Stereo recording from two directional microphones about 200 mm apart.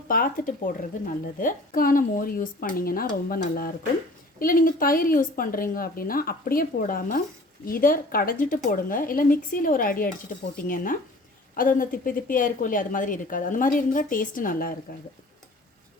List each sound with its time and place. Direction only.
0.1 s a woman's voice: 45° left (ahead or behind)